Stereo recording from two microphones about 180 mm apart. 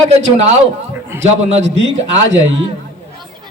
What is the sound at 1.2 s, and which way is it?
A man's voice, 90° right.